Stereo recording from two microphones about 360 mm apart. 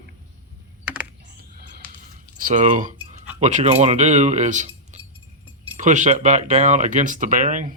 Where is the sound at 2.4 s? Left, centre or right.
Centre.